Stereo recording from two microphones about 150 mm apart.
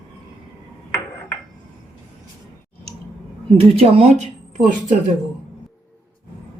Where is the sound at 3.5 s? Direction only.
40° right (ahead or behind).